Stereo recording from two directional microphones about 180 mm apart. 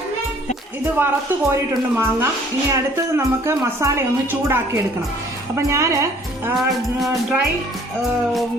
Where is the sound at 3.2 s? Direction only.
15° right (ahead or behind).